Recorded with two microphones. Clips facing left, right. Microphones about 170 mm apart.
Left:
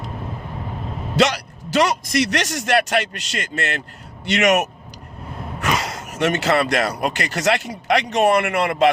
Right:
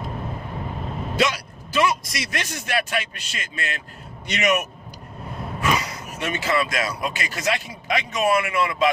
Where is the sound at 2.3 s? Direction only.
80° left.